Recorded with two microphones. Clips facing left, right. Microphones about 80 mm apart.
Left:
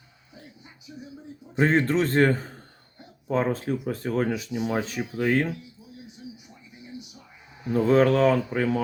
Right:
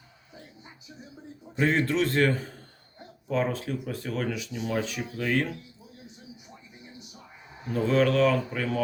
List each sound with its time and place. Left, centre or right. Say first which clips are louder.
1.5 s speech: left 3 dB; left
7.7 s speech: left 4 dB; left